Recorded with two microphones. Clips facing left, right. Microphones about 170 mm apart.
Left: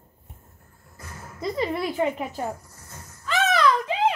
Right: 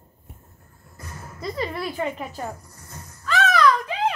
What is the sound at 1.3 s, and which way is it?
A woman's voice, 20° left (ahead or behind).